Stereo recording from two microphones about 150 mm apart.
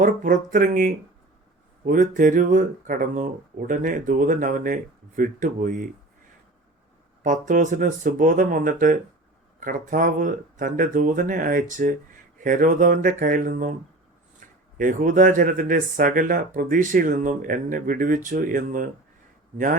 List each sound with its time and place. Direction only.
0.0 s speech: 60° right (ahead or behind)
7.2 s speech: 60° right (ahead or behind)
14.8 s speech: 60° right (ahead or behind)